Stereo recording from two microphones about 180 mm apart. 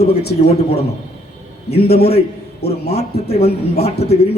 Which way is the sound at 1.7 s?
60° left (ahead or behind).